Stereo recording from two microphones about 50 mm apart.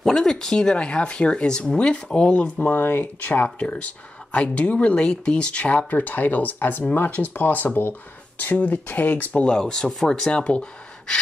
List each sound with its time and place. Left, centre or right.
0.0 s speech: centre
2.7 s speech: left
3.4 s speech: left
9.3 s speech: left
9.6 s speech: centre